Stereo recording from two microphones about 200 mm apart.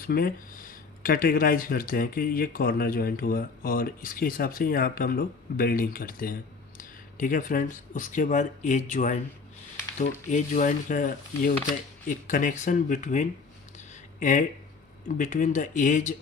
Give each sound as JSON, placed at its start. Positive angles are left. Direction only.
{"t": 0.1, "sound": "speech", "side_deg": 50}
{"t": 13.7, "sound": "a sound", "side_deg": 40}
{"t": 15.0, "sound": "speech", "side_deg": 40}